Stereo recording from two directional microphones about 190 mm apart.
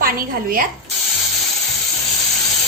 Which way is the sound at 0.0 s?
50° right (ahead or behind).